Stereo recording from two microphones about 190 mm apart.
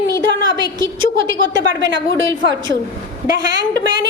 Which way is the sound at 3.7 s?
20° right (ahead or behind).